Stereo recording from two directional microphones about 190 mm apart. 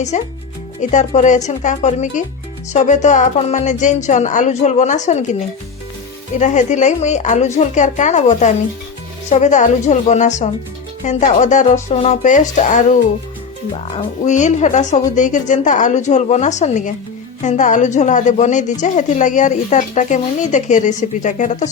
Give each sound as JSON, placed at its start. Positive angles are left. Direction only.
{"t": 0.1, "sound": "a woman's voice", "side_deg": 40}
{"t": 6.4, "sound": "a woman's voice", "side_deg": 40}